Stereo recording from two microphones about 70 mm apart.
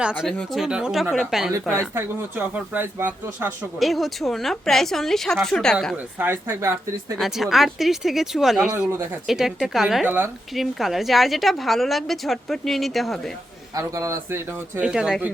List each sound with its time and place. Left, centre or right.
0.0 s a woman's voice: centre
2.0 s speech: right
3.8 s a woman's voice: centre
6.1 s speech: right
7.2 s a woman's voice: centre
10.0 s a woman's voice: right
10.5 s a woman's voice: centre
13.7 s a man's voice: right
14.8 s speech: centre